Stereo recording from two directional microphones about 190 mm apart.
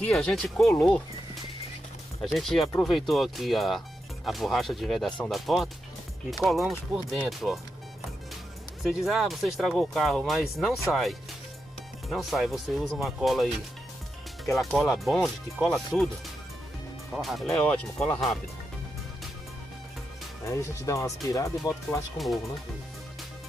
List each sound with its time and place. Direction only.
0.0 s speech: 5° left (ahead or behind)
2.3 s speech: centre (ahead or behind)
8.8 s speech: centre (ahead or behind)
17.1 s speech: centre (ahead or behind)
20.4 s speech: 15° left (ahead or behind)